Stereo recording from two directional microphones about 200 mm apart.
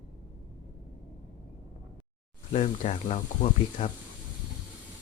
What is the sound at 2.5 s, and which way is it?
A man's voice, 35° left (ahead or behind).